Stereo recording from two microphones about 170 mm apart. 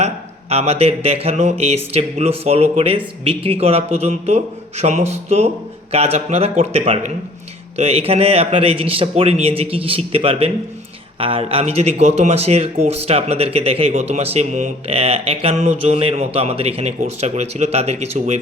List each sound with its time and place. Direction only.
0.5 s speech: 35° right (ahead or behind)